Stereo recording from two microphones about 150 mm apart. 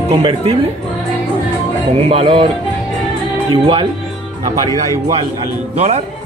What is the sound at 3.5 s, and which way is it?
Speech, 35° right (ahead or behind).